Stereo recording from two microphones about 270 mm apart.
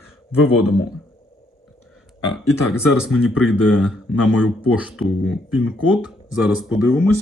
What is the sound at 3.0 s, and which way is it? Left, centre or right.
Speech, centre.